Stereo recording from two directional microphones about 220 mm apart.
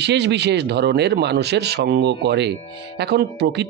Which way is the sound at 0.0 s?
50° right (ahead or behind).